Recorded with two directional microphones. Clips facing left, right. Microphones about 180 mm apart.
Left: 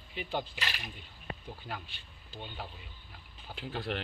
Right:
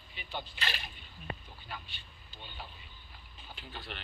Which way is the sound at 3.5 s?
90° left.